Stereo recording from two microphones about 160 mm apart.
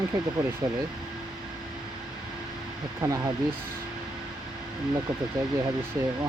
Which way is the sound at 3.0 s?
20° right (ahead or behind).